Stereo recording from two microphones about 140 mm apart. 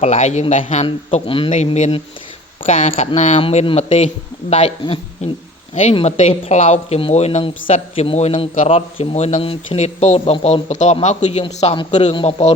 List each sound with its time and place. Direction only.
0.0 s speech: 55° left (ahead or behind)
2.6 s speech: 65° left (ahead or behind)
3.4 s speech: 45° left (ahead or behind)